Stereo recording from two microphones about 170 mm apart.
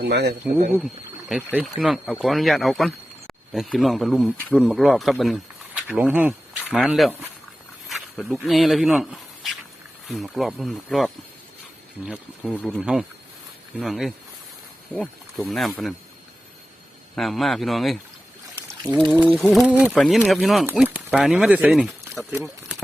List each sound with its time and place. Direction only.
0.0 s speech: 80° right
1.3 s speech: 10° right (ahead or behind)
17.2 s speech: centre (ahead or behind)
19.5 s speech: 10° right (ahead or behind)
20.0 s speech: 5° left (ahead or behind); by 22.4 s 15° right (ahead or behind)